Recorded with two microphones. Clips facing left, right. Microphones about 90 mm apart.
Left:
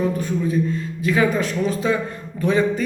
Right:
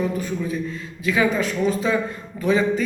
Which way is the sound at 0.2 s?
40° left (ahead or behind).